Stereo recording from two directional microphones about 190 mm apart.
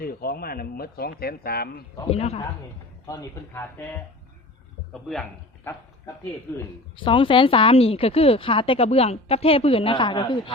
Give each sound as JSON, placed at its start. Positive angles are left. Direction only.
{"t": 0.0, "sound": "speech", "side_deg": 50}
{"t": 2.0, "sound": "a man's voice", "side_deg": 35}
{"t": 3.1, "sound": "speech", "side_deg": 15}
{"t": 6.5, "sound": "speech", "side_deg": 15}
{"t": 6.9, "sound": "a woman's voice", "side_deg": 25}